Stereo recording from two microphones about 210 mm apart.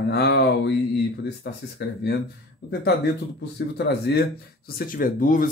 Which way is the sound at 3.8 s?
50° left (ahead or behind).